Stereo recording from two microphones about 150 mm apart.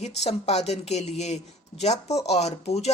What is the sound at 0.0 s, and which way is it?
Speech, 45° left (ahead or behind).